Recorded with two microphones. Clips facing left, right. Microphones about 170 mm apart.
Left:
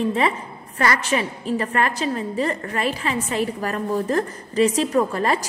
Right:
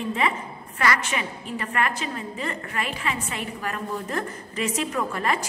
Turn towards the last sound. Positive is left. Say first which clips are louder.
# left 6 dB
turn(degrees=35)  # may be behind; listen again after turning